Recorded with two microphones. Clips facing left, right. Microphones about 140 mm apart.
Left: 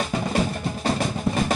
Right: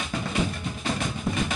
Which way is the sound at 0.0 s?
40° left (ahead or behind).